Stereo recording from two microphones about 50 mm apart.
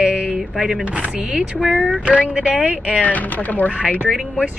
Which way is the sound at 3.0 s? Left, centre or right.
Left.